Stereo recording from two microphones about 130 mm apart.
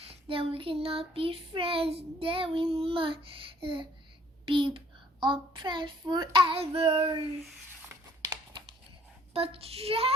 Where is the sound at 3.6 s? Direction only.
40° right (ahead or behind).